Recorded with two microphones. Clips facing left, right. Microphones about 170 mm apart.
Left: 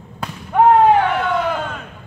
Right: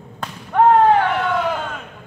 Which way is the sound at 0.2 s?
10° left (ahead or behind).